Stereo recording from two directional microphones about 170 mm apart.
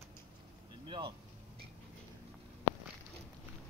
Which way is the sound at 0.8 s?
30° right (ahead or behind).